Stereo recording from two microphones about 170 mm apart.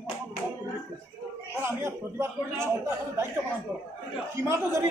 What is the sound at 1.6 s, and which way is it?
Speech, 15° right (ahead or behind).